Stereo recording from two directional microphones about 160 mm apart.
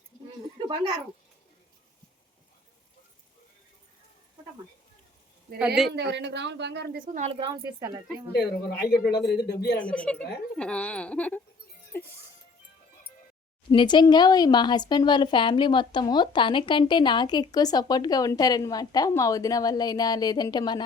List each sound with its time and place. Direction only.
5.5 s a woman's voice: 5° right (ahead or behind)
5.9 s speech: 90° right; by 7.3 s 55° right (ahead or behind)
7.3 s speech: 35° right (ahead or behind)
7.5 s speech: 20° right (ahead or behind)
8.3 s speech: 75° left (ahead or behind)
9.0 s a man's voice: 90° left
9.7 s speech: 10° left (ahead or behind)
13.7 s speech: 30° left (ahead or behind)